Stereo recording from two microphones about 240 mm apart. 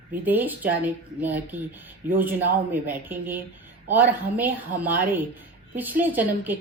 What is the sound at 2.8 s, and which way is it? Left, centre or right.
A woman's voice, centre.